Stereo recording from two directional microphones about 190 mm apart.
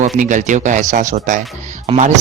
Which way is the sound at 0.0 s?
40° right (ahead or behind).